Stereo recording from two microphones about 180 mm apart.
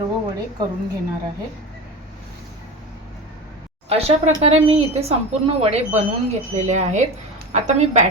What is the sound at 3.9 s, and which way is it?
A woman's voice, 35° right (ahead or behind).